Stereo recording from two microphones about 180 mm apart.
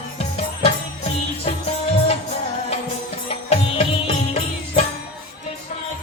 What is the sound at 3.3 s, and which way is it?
Music, 35° left (ahead or behind).